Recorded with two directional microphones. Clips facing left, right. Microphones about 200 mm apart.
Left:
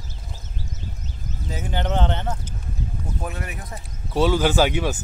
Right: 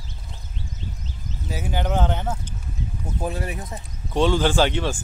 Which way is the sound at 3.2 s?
30° right (ahead or behind).